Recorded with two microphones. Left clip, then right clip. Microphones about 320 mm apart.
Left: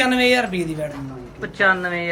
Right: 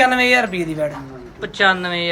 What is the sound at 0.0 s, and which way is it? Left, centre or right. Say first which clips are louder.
Speech: right 3 dB; centre.